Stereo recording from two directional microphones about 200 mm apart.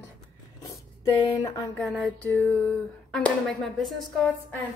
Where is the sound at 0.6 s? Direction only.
15° left (ahead or behind).